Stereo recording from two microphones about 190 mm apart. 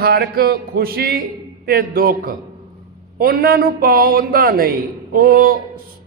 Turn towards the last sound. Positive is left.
turn(degrees=-50)  # may be behind; listen again after turning